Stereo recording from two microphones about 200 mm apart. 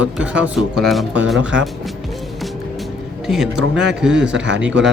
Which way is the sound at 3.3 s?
5° right (ahead or behind).